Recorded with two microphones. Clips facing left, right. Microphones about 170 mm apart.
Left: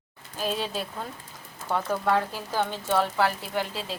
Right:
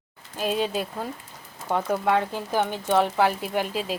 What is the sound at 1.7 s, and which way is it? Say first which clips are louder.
Speech: right 2 dB; 20° right (ahead or behind).